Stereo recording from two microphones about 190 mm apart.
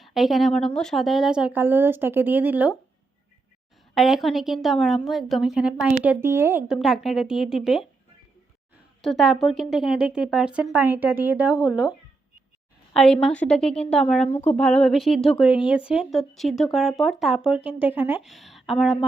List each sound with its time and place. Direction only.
0.0 s speech: centre (ahead or behind)
3.9 s speech: centre (ahead or behind)
9.0 s speech: centre (ahead or behind)
12.9 s a woman's voice: 5° left (ahead or behind)